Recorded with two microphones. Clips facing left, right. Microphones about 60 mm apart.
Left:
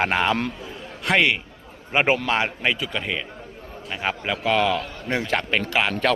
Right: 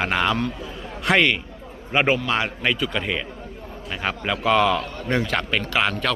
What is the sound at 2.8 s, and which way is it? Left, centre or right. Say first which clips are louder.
A man's voice: right 2 dB; centre.